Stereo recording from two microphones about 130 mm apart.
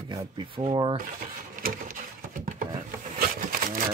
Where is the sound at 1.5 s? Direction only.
90° right.